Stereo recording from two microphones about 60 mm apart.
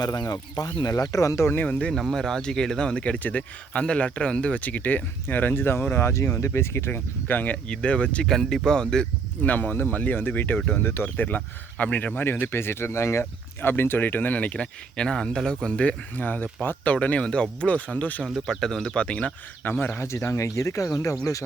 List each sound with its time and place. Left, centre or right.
0.0 s speech: left
1.6 s speech: left
1.9 s speech: centre; by 6.9 s left
6.9 s speech: left
8.3 s speech: centre
9.4 s speech: left
18.6 s speech: centre
19.6 s speech: left
20.0 s speech: left